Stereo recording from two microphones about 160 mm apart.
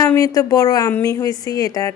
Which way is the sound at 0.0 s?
15° left (ahead or behind).